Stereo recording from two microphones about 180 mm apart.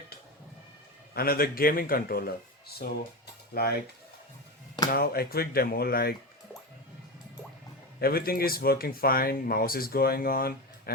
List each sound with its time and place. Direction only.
1.1 s speech: 55° left (ahead or behind)
4.9 s speech: 55° left (ahead or behind)
7.9 s speech: 55° left (ahead or behind)